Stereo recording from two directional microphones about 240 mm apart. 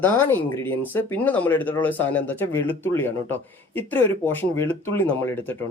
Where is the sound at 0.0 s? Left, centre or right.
Centre.